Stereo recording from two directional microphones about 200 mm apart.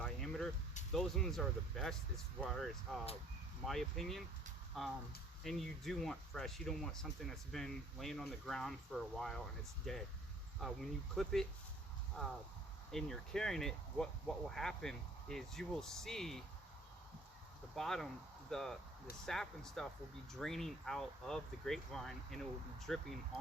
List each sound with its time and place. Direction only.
0.0 s vehicle: centre (ahead or behind)
0.9 s speech: centre (ahead or behind)
17.7 s speech: centre (ahead or behind)